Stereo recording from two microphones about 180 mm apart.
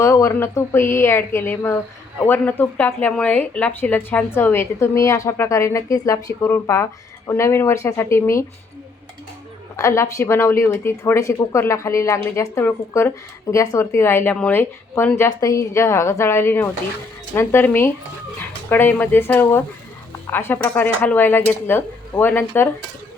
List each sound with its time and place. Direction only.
0.0 s speech: 15° left (ahead or behind)
9.7 s speech: 15° left (ahead or behind)